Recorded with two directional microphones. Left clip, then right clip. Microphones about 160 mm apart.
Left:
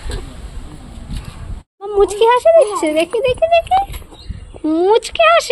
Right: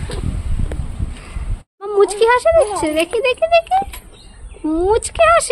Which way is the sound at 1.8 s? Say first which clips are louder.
Even; centre (ahead or behind).